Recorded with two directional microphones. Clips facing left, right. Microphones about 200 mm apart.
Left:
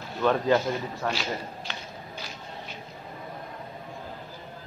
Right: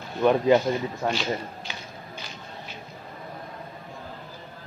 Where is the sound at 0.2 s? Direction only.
15° right (ahead or behind).